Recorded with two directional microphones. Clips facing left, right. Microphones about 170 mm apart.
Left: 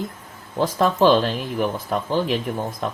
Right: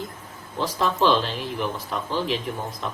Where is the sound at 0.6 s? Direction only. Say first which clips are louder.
Left 5 dB; 50° left (ahead or behind).